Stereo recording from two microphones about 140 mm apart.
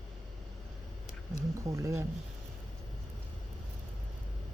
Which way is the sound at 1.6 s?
20° right (ahead or behind).